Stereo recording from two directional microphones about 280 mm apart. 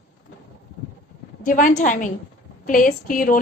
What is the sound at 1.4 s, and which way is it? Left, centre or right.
A woman's voice, left.